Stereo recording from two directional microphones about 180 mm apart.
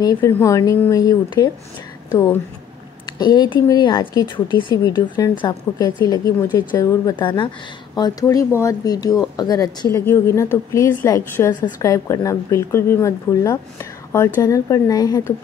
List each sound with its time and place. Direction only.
0.0 s a woman's voice: 20° left (ahead or behind)